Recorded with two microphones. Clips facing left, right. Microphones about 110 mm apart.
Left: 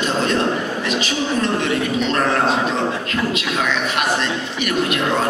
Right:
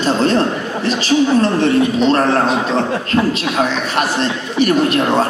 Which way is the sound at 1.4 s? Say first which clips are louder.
Right 6 dB; 35° right (ahead or behind).